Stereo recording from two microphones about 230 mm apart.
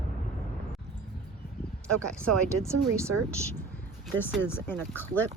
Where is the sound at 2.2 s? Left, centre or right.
Centre.